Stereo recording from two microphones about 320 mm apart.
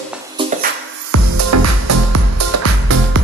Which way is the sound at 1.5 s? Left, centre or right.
Right.